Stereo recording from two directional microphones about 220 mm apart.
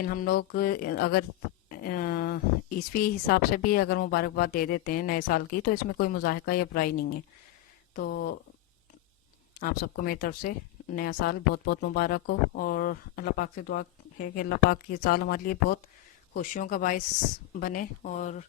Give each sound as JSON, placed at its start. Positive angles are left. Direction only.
{"t": 0.0, "sound": "speech", "side_deg": 40}
{"t": 9.6, "sound": "speech", "side_deg": 40}